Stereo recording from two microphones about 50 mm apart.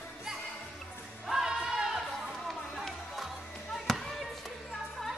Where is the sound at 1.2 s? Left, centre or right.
Centre.